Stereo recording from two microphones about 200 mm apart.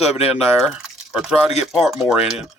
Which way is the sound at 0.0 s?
30° left (ahead or behind).